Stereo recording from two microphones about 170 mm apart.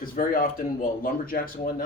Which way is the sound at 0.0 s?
55° left (ahead or behind).